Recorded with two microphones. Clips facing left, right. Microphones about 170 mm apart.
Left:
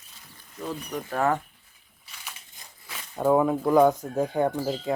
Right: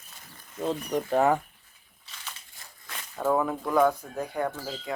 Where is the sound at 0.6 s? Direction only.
25° right (ahead or behind).